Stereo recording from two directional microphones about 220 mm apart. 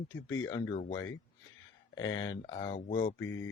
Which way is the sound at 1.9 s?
20° left (ahead or behind).